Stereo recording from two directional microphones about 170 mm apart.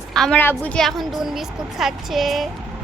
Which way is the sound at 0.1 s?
5° left (ahead or behind).